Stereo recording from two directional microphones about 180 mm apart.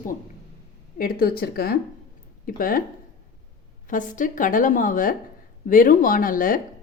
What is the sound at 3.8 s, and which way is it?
Speech, 45° left (ahead or behind).